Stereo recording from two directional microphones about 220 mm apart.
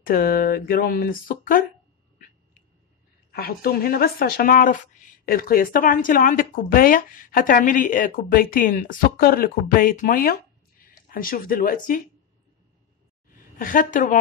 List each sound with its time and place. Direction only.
0.0 s speech: 40° left (ahead or behind)
2.1 s dog: 40° left (ahead or behind)
3.3 s speech: 45° left (ahead or behind)
13.3 s a woman's voice: 40° left (ahead or behind)